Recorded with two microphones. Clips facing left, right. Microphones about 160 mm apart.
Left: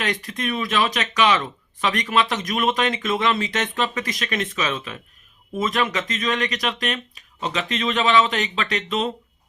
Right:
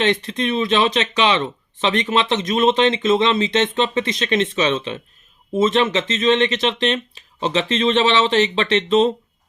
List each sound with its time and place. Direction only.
0.0 s speech: 25° right (ahead or behind)